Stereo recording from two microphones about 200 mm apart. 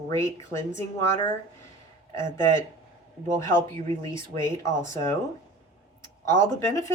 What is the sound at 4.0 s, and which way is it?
Speech, 15° left (ahead or behind).